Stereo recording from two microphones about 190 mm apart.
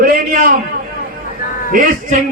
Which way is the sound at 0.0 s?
50° right (ahead or behind).